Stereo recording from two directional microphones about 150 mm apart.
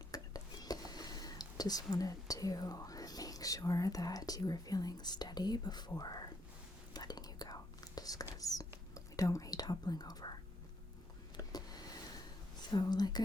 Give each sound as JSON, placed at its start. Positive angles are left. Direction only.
{"t": 0.1, "sound": "speech", "side_deg": 25}
{"t": 6.9, "sound": "whispering", "side_deg": 25}
{"t": 12.5, "sound": "speech", "side_deg": 30}